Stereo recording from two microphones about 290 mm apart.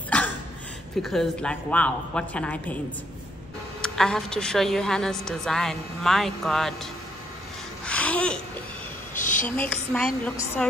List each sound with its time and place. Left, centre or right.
0.1 s a sound: centre
1.0 s a woman's voice: centre
3.8 s a woman's voice: centre
7.8 s babbling: centre
9.1 s a sound: left
9.6 s a woman's voice: centre